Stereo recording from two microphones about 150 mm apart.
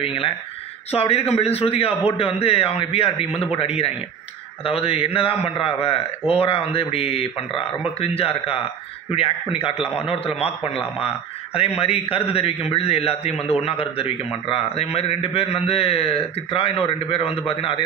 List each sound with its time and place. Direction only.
0.0 s a man's voice: 40° left (ahead or behind)
12.3 s a man's voice: 40° left (ahead or behind)